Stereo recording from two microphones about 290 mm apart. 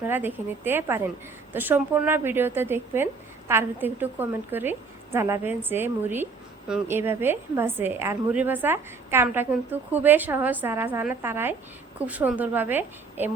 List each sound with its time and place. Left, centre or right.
0.0 s a woman's voice: centre